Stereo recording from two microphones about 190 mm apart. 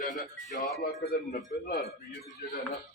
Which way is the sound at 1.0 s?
55° left (ahead or behind).